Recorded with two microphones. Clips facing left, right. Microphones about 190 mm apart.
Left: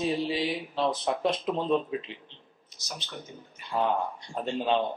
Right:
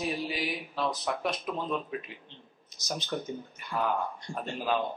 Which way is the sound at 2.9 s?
45° right (ahead or behind).